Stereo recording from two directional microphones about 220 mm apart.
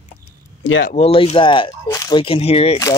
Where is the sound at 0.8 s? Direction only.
25° left (ahead or behind).